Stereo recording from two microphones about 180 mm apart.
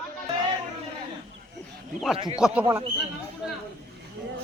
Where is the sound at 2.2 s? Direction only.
30° right (ahead or behind).